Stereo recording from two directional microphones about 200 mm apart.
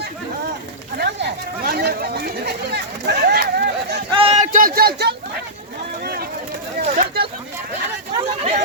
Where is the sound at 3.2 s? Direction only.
50° right (ahead or behind).